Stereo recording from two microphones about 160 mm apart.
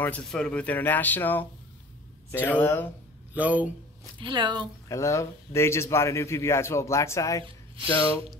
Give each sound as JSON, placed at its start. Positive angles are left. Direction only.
{"t": 0.0, "sound": "speech", "side_deg": 5}
{"t": 3.3, "sound": "speech", "side_deg": -10}
{"t": 4.0, "sound": "speech", "side_deg": -30}
{"t": 4.8, "sound": "speech", "side_deg": 20}